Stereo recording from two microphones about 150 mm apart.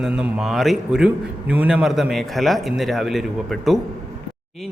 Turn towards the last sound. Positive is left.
turn(degrees=0)  # may be behind; listen again after turning